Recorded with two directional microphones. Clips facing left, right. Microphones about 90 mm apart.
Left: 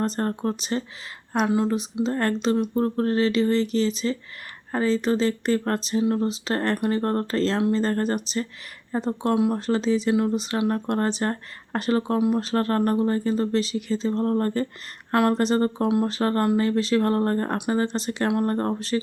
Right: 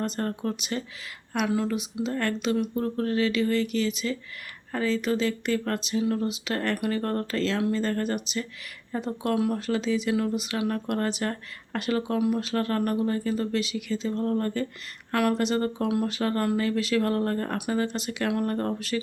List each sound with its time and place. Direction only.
0.0 s a woman's voice: 35° left (ahead or behind)